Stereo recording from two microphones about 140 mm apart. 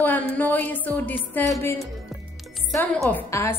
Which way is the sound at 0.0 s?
10° left (ahead or behind).